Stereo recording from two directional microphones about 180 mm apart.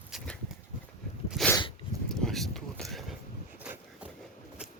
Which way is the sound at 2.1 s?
Centre (ahead or behind).